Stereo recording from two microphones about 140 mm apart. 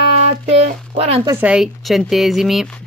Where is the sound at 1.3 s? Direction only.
10° right (ahead or behind).